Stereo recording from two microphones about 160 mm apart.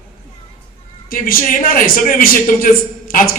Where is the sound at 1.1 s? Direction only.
65° left (ahead or behind).